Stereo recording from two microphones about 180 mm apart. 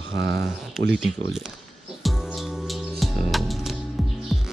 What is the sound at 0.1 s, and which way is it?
Speech, 75° right (ahead or behind).